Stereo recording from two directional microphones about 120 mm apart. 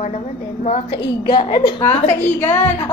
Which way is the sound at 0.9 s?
45° left (ahead or behind).